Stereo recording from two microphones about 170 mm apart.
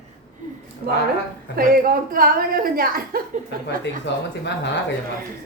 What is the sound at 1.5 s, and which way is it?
A woman's voice, 60° right (ahead or behind).